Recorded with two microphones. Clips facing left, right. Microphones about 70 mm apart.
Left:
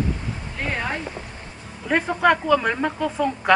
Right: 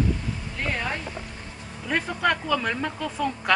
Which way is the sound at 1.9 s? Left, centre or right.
Left.